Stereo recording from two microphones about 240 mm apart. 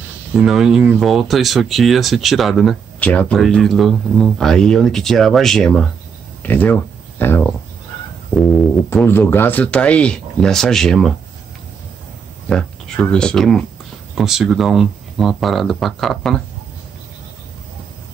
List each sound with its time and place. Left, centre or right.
0.4 s speech: centre
12.4 s speech: centre